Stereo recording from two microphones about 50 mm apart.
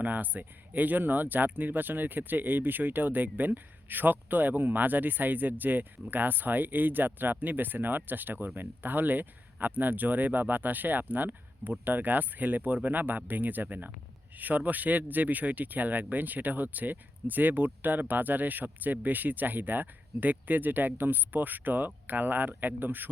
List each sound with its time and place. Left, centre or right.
0.0 s speech: right